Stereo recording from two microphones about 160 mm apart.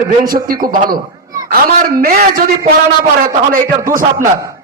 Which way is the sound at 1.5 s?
70° right (ahead or behind).